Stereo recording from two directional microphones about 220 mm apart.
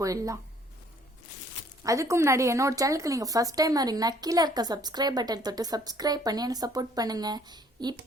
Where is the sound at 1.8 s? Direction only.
15° right (ahead or behind).